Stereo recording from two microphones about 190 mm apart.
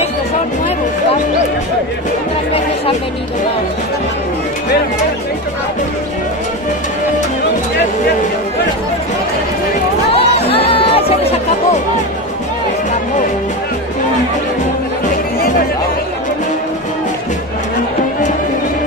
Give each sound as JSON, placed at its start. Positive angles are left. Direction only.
{"t": 10.1, "sound": "music", "side_deg": 30}